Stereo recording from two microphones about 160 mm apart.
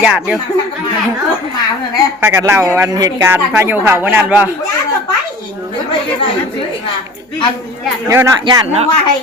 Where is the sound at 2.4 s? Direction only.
15° right (ahead or behind).